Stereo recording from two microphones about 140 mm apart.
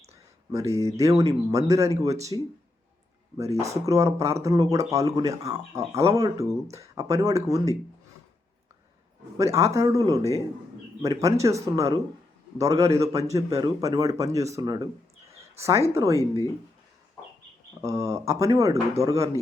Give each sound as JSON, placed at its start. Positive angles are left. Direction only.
{"t": 0.5, "sound": "speech", "side_deg": -20}
{"t": 3.8, "sound": "speech", "side_deg": -20}
{"t": 9.4, "sound": "speech", "side_deg": -20}
{"t": 17.7, "sound": "speech", "side_deg": -25}